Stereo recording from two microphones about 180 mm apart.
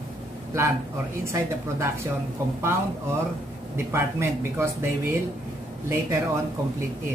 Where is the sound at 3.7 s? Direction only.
15° right (ahead or behind).